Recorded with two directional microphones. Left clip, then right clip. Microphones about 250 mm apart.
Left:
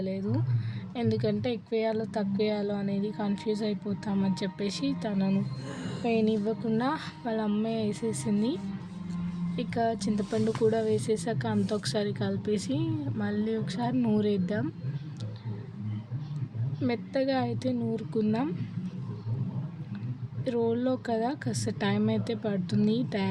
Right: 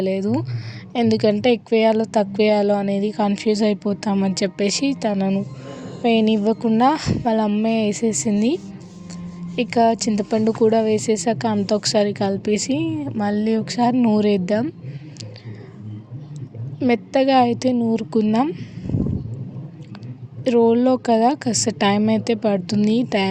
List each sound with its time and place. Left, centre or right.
0.0 s a woman's voice: right
9.6 s a woman's voice: right
16.8 s a woman's voice: right
20.4 s a woman's voice: right